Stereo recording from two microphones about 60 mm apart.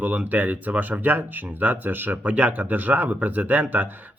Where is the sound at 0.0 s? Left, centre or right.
Right.